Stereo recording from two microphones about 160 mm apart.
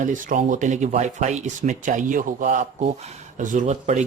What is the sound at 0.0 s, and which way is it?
Speech, 55° right (ahead or behind).